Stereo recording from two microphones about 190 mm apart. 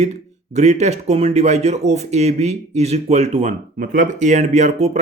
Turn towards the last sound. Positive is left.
turn(degrees=-35)  # may be behind; listen again after turning